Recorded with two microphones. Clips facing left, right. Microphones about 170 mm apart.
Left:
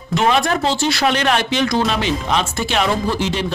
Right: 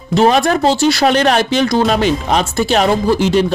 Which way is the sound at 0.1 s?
35° right (ahead or behind).